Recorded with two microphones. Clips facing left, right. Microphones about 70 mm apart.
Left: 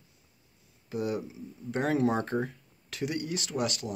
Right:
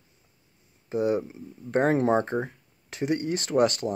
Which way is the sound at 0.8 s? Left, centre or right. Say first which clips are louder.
Right 7 dB; right.